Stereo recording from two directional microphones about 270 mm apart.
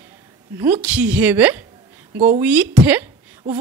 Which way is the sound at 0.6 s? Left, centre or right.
Centre.